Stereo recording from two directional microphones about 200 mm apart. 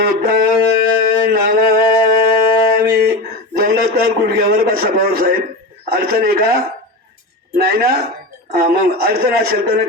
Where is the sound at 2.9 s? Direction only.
50° right (ahead or behind).